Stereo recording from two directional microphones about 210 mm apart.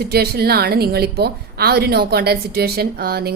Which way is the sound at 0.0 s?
50° right (ahead or behind).